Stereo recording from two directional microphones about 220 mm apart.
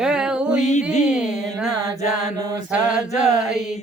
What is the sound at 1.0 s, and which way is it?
Speech, 5° right (ahead or behind).